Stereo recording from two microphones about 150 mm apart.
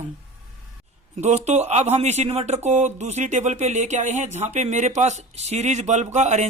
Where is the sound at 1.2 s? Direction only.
45° right (ahead or behind).